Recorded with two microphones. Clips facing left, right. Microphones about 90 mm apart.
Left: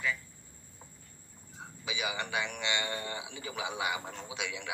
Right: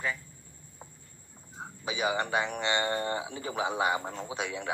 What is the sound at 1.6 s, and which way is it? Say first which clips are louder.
A man's voice: right 6 dB; 40° right (ahead or behind).